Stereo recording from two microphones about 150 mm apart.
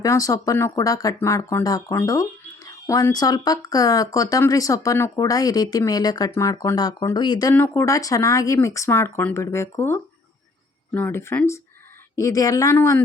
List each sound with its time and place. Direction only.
0.0 s a woman's voice: 20° left (ahead or behind)
7.5 s a woman's voice: 15° left (ahead or behind)